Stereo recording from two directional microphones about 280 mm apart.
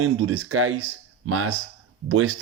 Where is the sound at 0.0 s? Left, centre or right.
Right.